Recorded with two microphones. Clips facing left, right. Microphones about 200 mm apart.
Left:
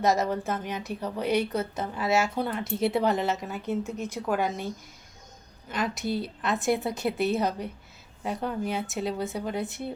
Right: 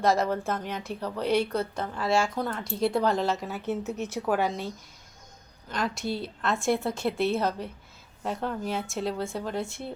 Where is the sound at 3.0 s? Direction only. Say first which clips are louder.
Even; 20° left (ahead or behind).